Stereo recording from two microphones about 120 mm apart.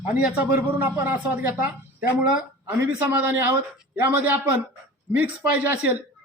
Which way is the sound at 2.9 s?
15° right (ahead or behind).